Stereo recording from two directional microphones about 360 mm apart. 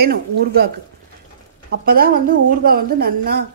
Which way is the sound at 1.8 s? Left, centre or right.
Right.